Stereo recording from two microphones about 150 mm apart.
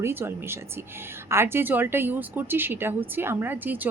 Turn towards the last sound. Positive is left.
turn(degrees=-10)  # may be behind; listen again after turning